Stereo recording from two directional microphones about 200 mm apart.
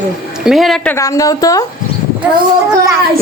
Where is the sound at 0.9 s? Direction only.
15° left (ahead or behind).